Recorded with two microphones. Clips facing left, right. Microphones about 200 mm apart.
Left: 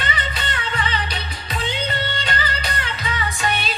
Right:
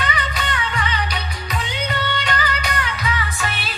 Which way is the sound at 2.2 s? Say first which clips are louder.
Right 2 dB; 30° left (ahead or behind).